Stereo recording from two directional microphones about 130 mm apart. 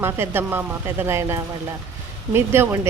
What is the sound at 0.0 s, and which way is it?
A woman's voice, 15° right (ahead or behind).